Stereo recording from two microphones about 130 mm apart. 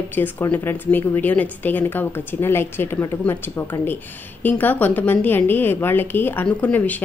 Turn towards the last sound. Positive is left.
turn(degrees=10)  # may be behind; listen again after turning